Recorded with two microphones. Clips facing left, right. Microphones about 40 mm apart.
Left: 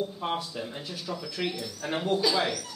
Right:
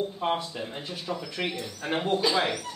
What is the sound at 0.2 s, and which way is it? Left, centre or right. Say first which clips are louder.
Speech: right 3 dB; right.